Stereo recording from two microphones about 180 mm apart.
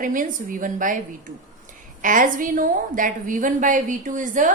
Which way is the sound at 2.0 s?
45° right (ahead or behind).